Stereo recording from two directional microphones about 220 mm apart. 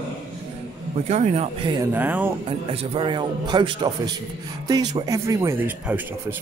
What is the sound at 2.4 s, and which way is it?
A man's voice, 25° right (ahead or behind).